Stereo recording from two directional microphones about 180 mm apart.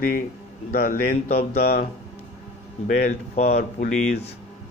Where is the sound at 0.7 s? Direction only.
50° left (ahead or behind).